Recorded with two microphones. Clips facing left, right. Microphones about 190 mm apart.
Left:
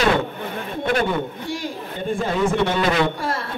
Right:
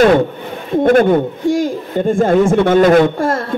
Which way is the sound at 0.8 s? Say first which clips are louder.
Right 11 dB; 45° right (ahead or behind).